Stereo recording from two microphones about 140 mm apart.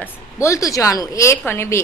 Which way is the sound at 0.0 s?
20° left (ahead or behind).